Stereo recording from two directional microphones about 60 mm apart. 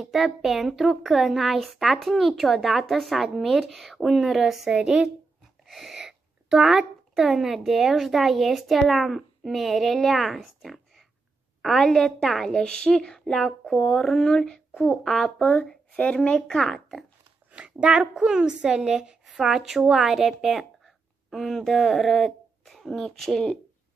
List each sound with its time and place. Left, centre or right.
0.0 s a woman's voice: centre
5.7 s a woman's voice: centre
14.7 s speech: left
15.0 s a woman's voice: centre
15.3 s a woman's voice: left
17.5 s a woman's voice: centre